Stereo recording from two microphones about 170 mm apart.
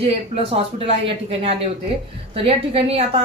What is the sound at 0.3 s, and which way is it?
A woman's voice, 40° right (ahead or behind).